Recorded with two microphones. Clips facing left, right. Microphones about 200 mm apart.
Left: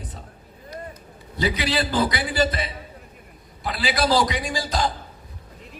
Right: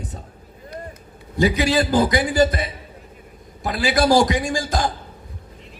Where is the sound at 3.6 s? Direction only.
45° right (ahead or behind).